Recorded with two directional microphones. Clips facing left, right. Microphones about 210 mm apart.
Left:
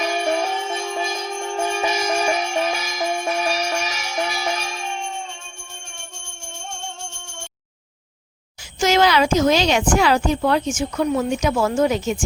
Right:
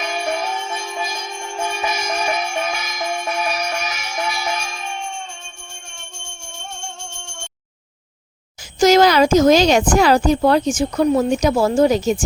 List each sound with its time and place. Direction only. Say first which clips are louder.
0.0 s music: left 2 dB; 35° left (ahead or behind)
8.8 s speech: right 5 dB; 40° right (ahead or behind)